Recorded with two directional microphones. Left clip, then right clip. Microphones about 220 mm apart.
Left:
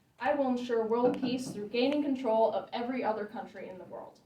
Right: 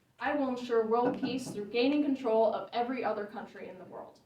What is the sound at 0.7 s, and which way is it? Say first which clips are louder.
A woman's voice: right 1 dB; 20° left (ahead or behind).